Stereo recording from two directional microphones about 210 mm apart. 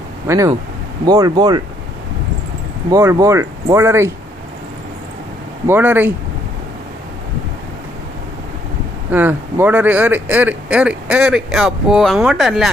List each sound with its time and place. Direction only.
0.3 s speech: 15° right (ahead or behind)
2.9 s speech: 15° right (ahead or behind)
5.6 s speech: 10° right (ahead or behind)
9.1 s speech: 10° right (ahead or behind)